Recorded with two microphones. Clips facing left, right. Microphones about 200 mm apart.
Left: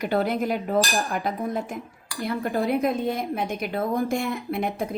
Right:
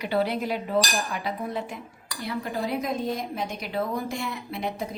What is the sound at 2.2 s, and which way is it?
A woman's voice, 55° left (ahead or behind).